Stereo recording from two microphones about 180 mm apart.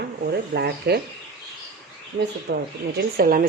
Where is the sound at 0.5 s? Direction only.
65° right (ahead or behind).